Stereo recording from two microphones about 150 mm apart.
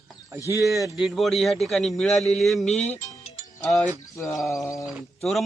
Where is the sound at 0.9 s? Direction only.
Centre (ahead or behind).